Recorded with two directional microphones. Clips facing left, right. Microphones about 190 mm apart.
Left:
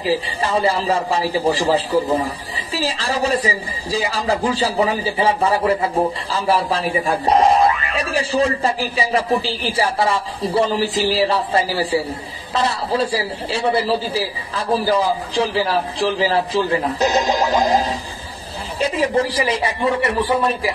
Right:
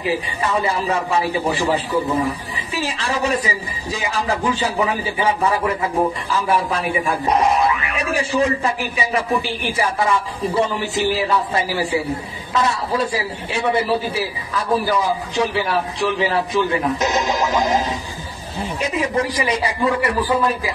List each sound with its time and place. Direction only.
0.0 s a man's voice: 30° left (ahead or behind)